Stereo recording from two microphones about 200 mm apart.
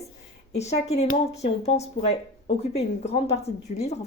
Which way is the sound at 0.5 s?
35° left (ahead or behind).